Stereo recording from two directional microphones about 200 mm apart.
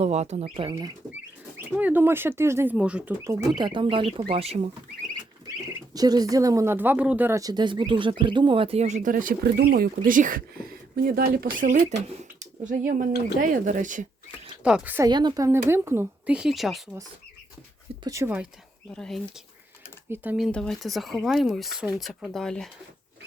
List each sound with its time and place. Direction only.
0.0 s speech: 35° right (ahead or behind)
1.1 s speech: 10° right (ahead or behind)
3.5 s speech: 25° right (ahead or behind)
5.9 s speech: 20° right (ahead or behind); by 11.9 s 40° right (ahead or behind)
13.4 s speech: 40° right (ahead or behind)
14.6 s speech: 5° right (ahead or behind)
18.0 s speech: 15° right (ahead or behind)
18.9 s speech: centre (ahead or behind)